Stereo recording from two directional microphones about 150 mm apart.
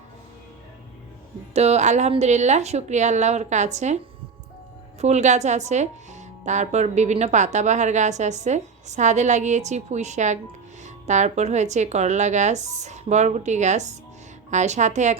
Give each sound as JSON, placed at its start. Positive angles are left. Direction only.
{"t": 1.5, "sound": "a woman's voice", "side_deg": -45}